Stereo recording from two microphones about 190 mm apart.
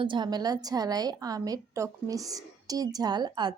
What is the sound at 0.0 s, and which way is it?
A woman's voice, 25° right (ahead or behind).